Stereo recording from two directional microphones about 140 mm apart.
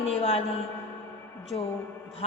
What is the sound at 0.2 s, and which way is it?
Speech, 45° left (ahead or behind).